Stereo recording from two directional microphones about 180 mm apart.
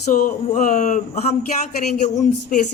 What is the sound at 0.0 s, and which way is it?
A woman's voice, 45° left (ahead or behind).